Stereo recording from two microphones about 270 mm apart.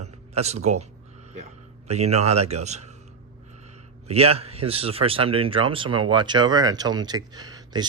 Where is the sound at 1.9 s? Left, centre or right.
Right.